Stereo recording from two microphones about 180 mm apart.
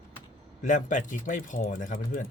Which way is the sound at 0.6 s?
45° left (ahead or behind).